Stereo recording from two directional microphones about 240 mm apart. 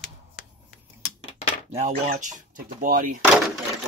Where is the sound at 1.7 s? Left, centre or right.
Right.